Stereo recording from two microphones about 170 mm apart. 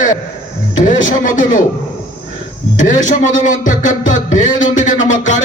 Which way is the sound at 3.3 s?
50° left (ahead or behind).